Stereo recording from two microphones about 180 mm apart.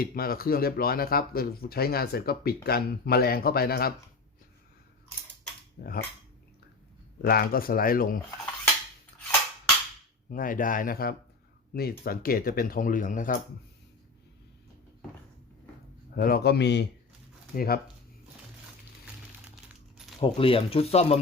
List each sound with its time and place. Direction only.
0.0 s speech: 55° left (ahead or behind)
5.8 s speech: 65° left (ahead or behind)
7.2 s speech: 55° left (ahead or behind)
10.2 s speech: 50° left (ahead or behind)
16.1 s speech: 55° left (ahead or behind)
17.5 s speech: 55° left (ahead or behind)
20.2 s speech: 30° left (ahead or behind)